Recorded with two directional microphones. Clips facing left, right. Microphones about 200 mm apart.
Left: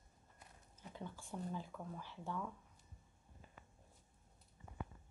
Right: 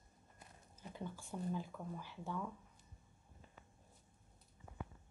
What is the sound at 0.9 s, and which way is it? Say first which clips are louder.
Speech: right 2 dB; 5° right (ahead or behind).